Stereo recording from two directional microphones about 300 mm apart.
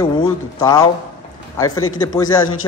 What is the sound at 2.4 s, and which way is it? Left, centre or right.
Speech, left.